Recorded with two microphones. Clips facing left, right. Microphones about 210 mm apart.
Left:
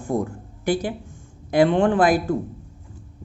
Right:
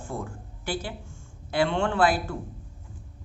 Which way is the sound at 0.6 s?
15° left (ahead or behind).